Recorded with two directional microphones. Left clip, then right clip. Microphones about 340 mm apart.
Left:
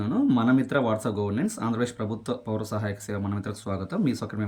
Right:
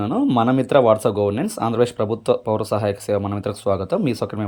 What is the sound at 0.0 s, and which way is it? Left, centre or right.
Speech, centre.